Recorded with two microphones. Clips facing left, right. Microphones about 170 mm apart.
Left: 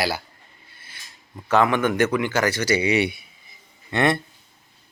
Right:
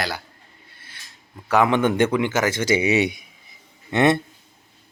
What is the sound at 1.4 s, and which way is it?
Speech, 10° right (ahead or behind).